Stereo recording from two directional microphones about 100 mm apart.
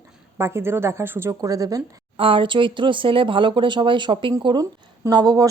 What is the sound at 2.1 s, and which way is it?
Speech, 65° right (ahead or behind).